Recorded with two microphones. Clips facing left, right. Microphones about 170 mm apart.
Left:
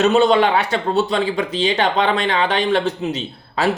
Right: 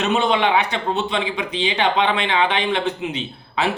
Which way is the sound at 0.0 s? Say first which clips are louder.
Left 5 dB; 45° left (ahead or behind).